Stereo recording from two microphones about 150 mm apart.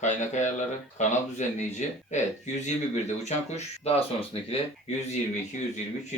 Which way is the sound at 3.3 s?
45° left (ahead or behind).